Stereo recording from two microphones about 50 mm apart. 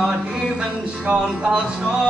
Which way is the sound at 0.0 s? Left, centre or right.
Right.